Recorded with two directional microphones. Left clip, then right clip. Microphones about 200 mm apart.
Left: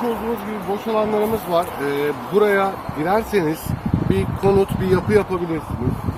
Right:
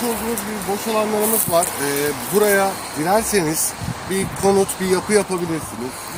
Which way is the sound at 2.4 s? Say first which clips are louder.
Even; 25° right (ahead or behind).